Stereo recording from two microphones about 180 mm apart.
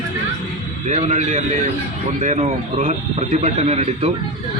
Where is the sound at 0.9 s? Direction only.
40° right (ahead or behind).